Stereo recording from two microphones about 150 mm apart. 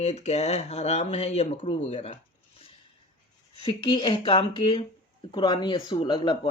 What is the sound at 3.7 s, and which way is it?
Speech, 35° left (ahead or behind).